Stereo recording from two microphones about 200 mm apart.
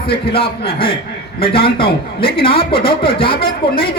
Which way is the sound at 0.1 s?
25° left (ahead or behind).